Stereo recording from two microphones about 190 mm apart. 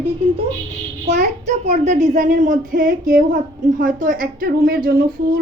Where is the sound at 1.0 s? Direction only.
35° right (ahead or behind).